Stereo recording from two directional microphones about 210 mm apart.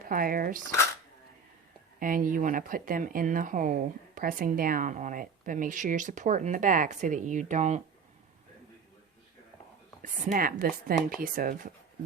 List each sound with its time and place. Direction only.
0.0 s speech: 40° right (ahead or behind)
2.0 s speech: 40° right (ahead or behind)
10.0 s a woman's voice: 40° right (ahead or behind)